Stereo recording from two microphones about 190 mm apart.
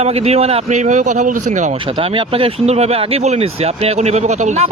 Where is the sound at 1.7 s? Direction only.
25° right (ahead or behind).